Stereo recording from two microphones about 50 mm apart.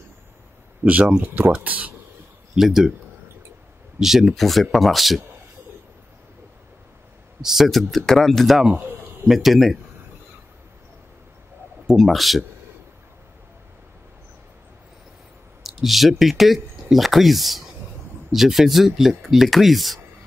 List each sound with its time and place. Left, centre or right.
0.8 s speech: right
2.5 s speech: centre
4.0 s speech: centre
7.4 s speech: centre
11.9 s speech: centre
15.6 s speech: centre